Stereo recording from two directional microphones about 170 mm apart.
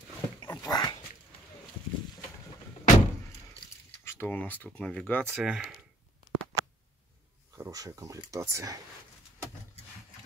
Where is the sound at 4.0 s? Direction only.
15° left (ahead or behind); by 5.8 s 5° right (ahead or behind).